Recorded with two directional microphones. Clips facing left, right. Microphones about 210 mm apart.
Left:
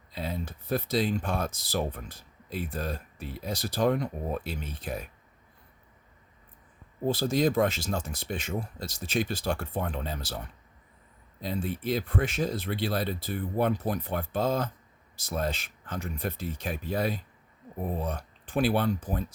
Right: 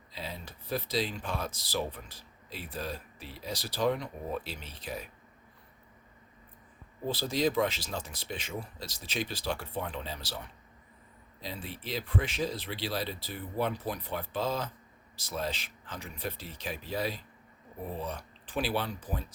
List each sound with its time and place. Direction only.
0.1 s speech: 50° left (ahead or behind)
7.0 s speech: 45° left (ahead or behind)